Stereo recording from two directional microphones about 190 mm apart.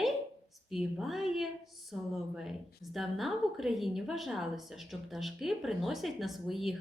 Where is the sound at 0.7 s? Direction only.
Centre (ahead or behind).